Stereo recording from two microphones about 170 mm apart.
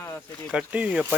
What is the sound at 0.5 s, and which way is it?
Speech, 5° right (ahead or behind).